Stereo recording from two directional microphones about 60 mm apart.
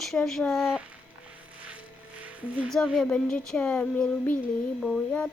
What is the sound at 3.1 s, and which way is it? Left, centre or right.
Speech, centre.